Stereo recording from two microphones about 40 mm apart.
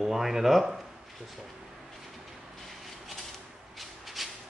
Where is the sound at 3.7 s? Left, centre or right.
Centre.